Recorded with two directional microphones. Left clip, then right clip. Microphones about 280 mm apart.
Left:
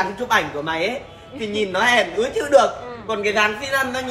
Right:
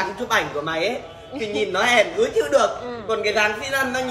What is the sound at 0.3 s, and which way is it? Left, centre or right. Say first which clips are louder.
A woman's voice: left 1 dB; left.